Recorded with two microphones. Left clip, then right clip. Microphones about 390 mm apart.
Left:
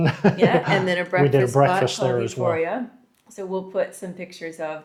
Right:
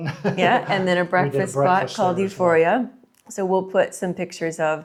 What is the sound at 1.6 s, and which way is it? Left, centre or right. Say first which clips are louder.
Speech: left 1 dB; left.